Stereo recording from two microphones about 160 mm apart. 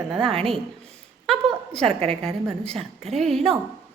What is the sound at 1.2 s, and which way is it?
Speech, centre (ahead or behind).